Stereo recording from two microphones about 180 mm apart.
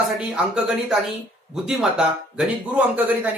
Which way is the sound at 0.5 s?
5° right (ahead or behind).